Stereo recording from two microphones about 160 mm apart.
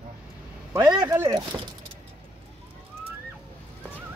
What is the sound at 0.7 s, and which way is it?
Speech, 25° right (ahead or behind).